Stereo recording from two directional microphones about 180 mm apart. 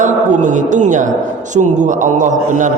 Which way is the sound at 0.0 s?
45° right (ahead or behind).